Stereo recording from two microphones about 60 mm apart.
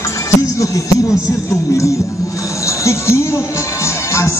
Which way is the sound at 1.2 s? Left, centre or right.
Left.